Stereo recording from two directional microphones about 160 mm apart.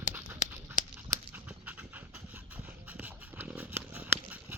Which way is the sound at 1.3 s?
10° right (ahead or behind).